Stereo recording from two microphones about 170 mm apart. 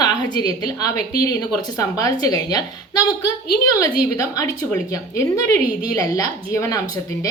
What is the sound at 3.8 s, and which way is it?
A woman's voice, 20° left (ahead or behind).